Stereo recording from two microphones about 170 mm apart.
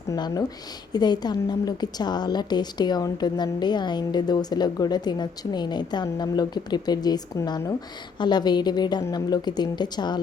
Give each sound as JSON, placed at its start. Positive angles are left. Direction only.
{"t": 0.1, "sound": "a woman's voice", "side_deg": 20}